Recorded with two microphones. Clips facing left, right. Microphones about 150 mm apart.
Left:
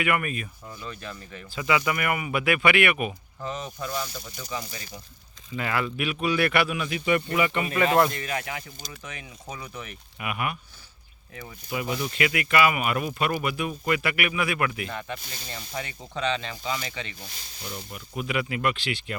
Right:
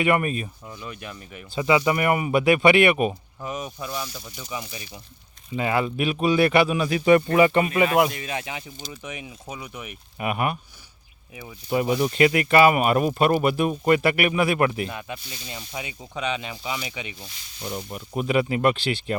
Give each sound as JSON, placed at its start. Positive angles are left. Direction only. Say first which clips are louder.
{"t": 0.0, "sound": "speech", "louder": "right 5 dB", "side_deg": -30}
{"t": 0.7, "sound": "speech", "louder": "right 1 dB", "side_deg": -15}
{"t": 1.5, "sound": "speech", "louder": "right 5 dB", "side_deg": -25}
{"t": 3.4, "sound": "speech", "louder": "right 1 dB", "side_deg": -15}
{"t": 5.5, "sound": "speech", "louder": "right 5 dB", "side_deg": -25}
{"t": 7.9, "sound": "speech", "louder": "right 1 dB", "side_deg": -10}
{"t": 10.2, "sound": "speech", "louder": "right 5 dB", "side_deg": -35}
{"t": 11.9, "sound": "speech", "louder": "right 8 dB", "side_deg": -35}
{"t": 14.8, "sound": "speech", "louder": "even", "side_deg": -10}
{"t": 17.7, "sound": "speech", "louder": "right 6 dB", "side_deg": -35}